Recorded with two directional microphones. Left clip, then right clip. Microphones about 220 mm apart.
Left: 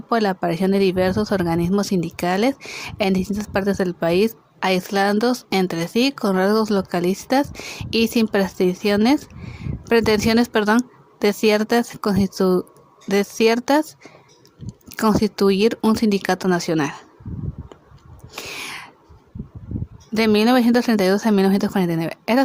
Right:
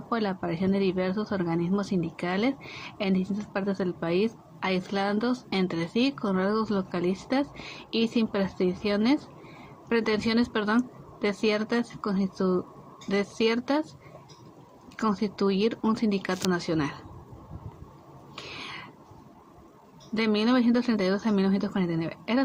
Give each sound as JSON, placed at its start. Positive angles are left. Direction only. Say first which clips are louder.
{"t": 0.1, "sound": "speech", "louder": "left 10 dB", "side_deg": 50}
{"t": 14.9, "sound": "speech", "louder": "left 10 dB", "side_deg": 50}
{"t": 18.3, "sound": "a sound", "louder": "left 8 dB", "side_deg": 50}
{"t": 20.1, "sound": "speech", "louder": "left 9 dB", "side_deg": 50}